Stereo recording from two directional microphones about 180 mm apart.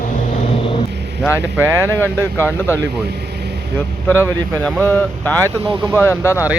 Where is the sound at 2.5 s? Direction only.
10° left (ahead or behind).